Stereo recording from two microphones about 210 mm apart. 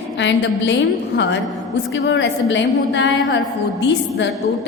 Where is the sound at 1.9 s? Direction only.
55° left (ahead or behind).